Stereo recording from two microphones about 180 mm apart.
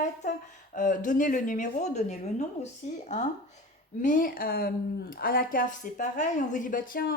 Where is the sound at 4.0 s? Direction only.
50° left (ahead or behind).